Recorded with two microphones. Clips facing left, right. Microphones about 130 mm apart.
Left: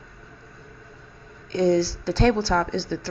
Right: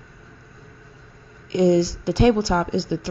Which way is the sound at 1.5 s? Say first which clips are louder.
Right 3 dB; 15° right (ahead or behind).